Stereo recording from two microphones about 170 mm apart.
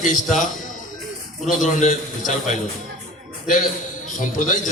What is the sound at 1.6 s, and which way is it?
A man's voice, 45° left (ahead or behind).